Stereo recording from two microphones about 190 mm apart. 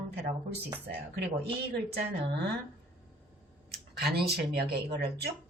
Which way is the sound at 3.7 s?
60° right (ahead or behind).